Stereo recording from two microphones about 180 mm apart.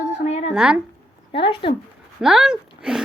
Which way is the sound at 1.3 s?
30° left (ahead or behind).